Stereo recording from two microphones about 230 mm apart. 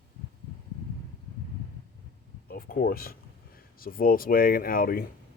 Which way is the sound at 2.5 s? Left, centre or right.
Left.